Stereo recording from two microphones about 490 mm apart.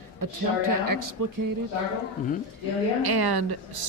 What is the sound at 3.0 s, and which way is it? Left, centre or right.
Speech, right.